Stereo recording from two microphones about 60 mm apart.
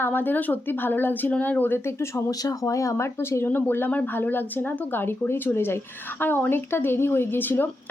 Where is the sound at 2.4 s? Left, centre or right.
Left.